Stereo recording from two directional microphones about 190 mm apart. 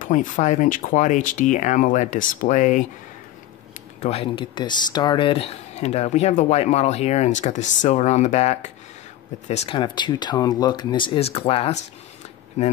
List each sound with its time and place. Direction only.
0.0 s speech: 40° left (ahead or behind)
4.0 s speech: 30° left (ahead or behind)